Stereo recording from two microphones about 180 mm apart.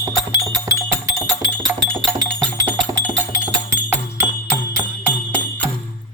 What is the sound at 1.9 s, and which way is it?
Music, 5° left (ahead or behind).